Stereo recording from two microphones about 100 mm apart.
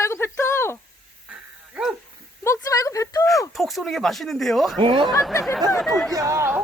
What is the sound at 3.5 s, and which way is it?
Speech, centre (ahead or behind).